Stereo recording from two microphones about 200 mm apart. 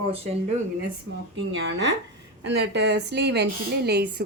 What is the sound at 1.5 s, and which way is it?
A woman's voice, 65° right (ahead or behind).